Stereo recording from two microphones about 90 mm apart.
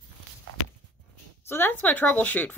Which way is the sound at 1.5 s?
25° left (ahead or behind).